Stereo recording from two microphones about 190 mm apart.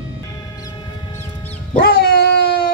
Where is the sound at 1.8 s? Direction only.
55° left (ahead or behind).